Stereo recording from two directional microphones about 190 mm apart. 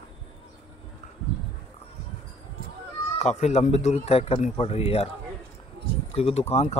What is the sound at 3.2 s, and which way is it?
A man's voice, 35° left (ahead or behind).